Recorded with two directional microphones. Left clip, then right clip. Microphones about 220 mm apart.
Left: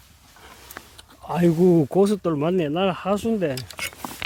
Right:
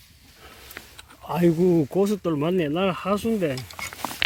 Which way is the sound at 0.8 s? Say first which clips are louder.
Left 1 dB; 25° left (ahead or behind).